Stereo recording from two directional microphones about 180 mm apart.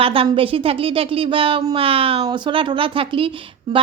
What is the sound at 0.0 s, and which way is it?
Speech, 30° right (ahead or behind).